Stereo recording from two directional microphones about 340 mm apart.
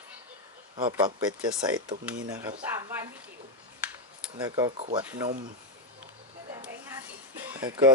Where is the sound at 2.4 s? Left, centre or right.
Centre.